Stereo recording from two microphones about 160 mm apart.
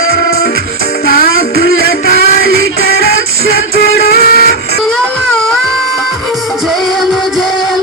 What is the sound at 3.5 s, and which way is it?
Music, 70° left (ahead or behind).